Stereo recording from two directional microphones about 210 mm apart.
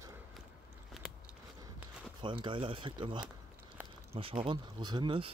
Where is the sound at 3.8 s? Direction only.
10° right (ahead or behind).